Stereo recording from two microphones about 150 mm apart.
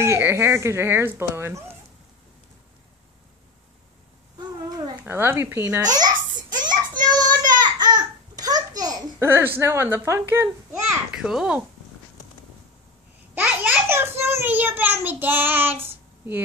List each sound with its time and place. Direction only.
0.0 s speech: 15° right (ahead or behind)
4.4 s babbling: 25° right (ahead or behind)
5.0 s speech: 15° right (ahead or behind)
6.6 s child singing: 30° right (ahead or behind)
7.6 s babbling: 30° right (ahead or behind)
9.6 s speech: 15° right (ahead or behind)
11.1 s a child's voice: 5° right (ahead or behind)
13.3 s a sound: 10° right (ahead or behind)